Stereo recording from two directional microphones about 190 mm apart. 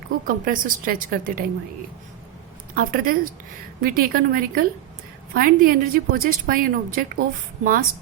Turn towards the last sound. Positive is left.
turn(degrees=-45)  # may be behind; listen again after turning